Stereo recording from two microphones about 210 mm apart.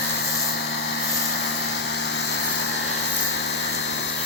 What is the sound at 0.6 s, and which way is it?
Vehicle, 55° left (ahead or behind).